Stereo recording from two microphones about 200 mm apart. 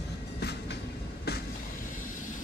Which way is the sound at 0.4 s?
55° left (ahead or behind).